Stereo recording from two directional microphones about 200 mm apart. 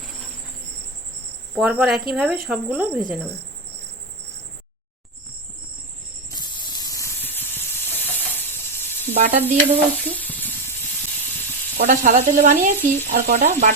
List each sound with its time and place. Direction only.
1.6 s speech: 5° right (ahead or behind)
6.2 s spray: 20° left (ahead or behind)
9.1 s sizzle: 35° right (ahead or behind)
10.2 s sizzle: 10° left (ahead or behind)
11.8 s sizzle: 40° right (ahead or behind)